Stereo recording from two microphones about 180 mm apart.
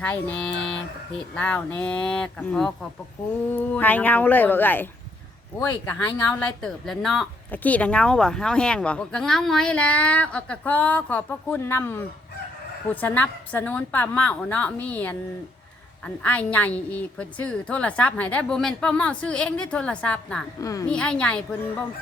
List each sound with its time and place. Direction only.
0.0 s speech: 10° left (ahead or behind)
20.6 s a woman's voice: 20° left (ahead or behind)
20.8 s speech: 5° left (ahead or behind)